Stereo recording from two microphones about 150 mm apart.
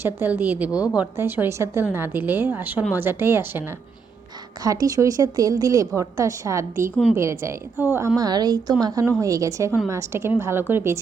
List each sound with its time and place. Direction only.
0.0 s a woman's voice: 15° right (ahead or behind)
4.6 s a woman's voice: 25° right (ahead or behind)